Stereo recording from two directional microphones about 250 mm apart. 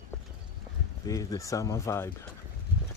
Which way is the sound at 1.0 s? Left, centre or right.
Centre.